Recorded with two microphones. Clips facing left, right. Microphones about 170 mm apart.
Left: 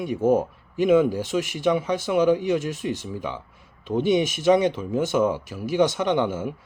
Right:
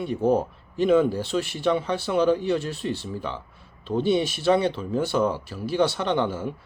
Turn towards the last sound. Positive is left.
turn(degrees=20)  # may be behind; listen again after turning